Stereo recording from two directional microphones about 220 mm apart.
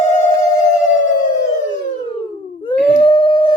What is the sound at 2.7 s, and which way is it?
Howl, 5° left (ahead or behind).